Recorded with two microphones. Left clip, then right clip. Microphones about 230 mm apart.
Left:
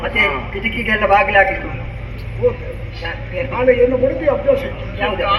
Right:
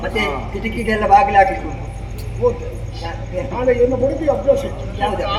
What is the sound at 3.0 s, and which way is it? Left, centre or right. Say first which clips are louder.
A man's voice: left 2 dB; right.